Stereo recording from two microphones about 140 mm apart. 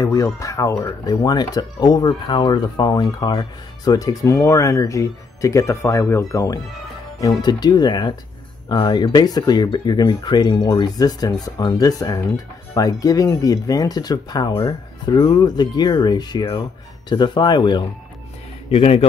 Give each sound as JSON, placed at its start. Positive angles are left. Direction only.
{"t": 0.0, "sound": "speech", "side_deg": 25}
{"t": 18.7, "sound": "a man's voice", "side_deg": 45}